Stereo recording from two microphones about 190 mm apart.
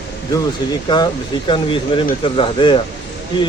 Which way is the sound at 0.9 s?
25° left (ahead or behind).